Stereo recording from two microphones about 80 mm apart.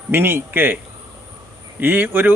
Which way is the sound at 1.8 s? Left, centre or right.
Right.